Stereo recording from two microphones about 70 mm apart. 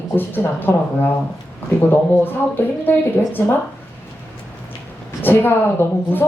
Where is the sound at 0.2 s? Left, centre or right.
Left.